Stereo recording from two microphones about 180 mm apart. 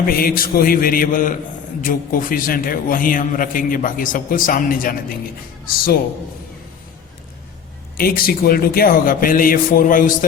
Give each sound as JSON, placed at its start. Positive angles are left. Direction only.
{"t": 0.1, "sound": "a man's voice", "side_deg": 55}
{"t": 7.9, "sound": "a man's voice", "side_deg": 55}